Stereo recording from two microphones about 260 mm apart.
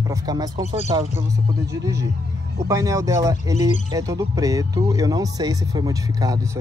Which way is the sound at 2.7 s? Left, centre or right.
Centre.